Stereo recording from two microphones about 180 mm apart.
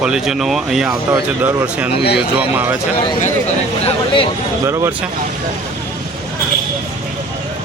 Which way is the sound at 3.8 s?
30° left (ahead or behind).